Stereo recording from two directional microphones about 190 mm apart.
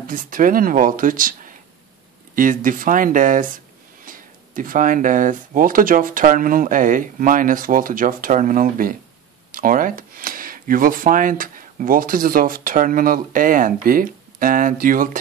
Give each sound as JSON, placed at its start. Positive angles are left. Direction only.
{"t": 0.0, "sound": "speech", "side_deg": -45}